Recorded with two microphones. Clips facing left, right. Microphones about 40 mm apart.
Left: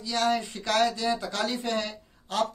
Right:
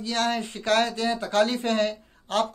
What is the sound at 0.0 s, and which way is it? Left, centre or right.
A man's voice, right.